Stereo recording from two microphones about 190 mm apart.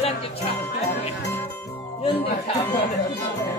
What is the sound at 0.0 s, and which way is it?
Jingle bell, 35° left (ahead or behind).